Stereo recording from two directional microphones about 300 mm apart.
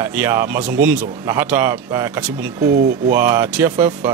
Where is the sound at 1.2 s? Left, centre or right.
Centre.